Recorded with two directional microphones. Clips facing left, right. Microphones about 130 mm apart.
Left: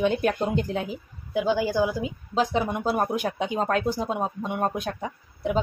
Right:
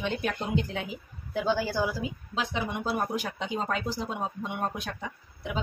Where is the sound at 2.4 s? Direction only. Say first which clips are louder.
Left 7 dB; 45° left (ahead or behind).